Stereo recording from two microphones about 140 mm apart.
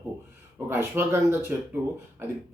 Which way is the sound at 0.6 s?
15° right (ahead or behind).